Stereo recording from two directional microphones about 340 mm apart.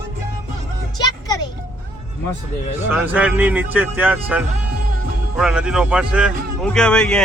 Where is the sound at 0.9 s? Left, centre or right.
Centre.